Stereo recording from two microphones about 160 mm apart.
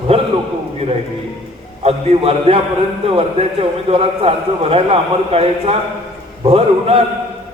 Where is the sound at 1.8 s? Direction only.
40° right (ahead or behind).